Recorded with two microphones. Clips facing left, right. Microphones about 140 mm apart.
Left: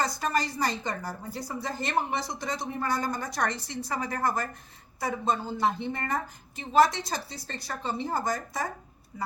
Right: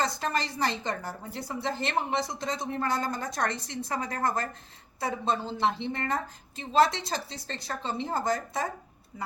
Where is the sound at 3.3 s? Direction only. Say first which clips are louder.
Left 1 dB; 20° right (ahead or behind).